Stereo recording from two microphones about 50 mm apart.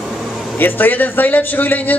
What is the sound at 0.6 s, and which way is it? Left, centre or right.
A man's voice, left.